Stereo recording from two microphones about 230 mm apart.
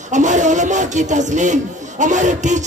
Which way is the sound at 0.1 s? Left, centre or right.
Right.